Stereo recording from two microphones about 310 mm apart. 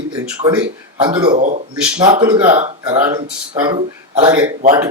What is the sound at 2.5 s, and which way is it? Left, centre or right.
Speech, centre.